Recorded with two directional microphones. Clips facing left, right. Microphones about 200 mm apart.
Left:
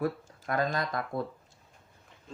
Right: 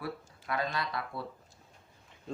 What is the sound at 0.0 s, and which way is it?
Speech, 45° left (ahead or behind).